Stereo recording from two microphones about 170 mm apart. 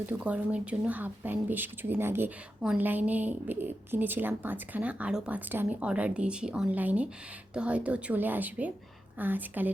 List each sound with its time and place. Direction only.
0.1 s speech: 10° right (ahead or behind)